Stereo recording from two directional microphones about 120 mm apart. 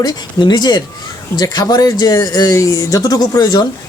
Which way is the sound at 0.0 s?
35° left (ahead or behind).